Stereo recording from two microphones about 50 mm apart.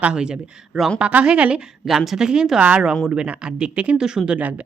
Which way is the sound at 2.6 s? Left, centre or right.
Right.